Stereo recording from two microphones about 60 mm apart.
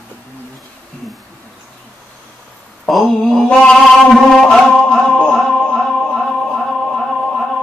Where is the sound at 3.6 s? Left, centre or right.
Centre.